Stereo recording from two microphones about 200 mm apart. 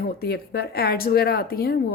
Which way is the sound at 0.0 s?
50° left (ahead or behind).